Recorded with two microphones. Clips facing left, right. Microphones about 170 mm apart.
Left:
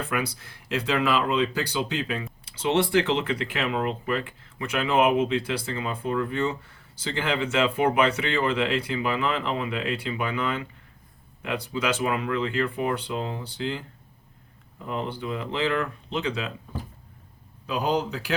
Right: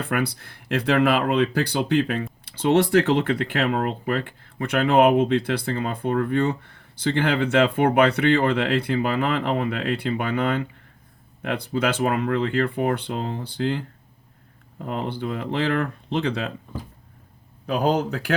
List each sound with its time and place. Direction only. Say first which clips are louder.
0.0 s speech: right 4 dB; 60° right (ahead or behind)
3.0 s speech: right 4 dB; 40° right (ahead or behind)
3.2 s speech: right 5 dB; 55° right (ahead or behind)
17.7 s speech: right 4 dB; 55° right (ahead or behind)